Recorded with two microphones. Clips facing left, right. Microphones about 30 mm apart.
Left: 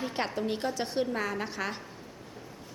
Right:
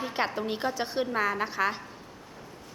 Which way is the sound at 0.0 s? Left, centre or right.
Centre.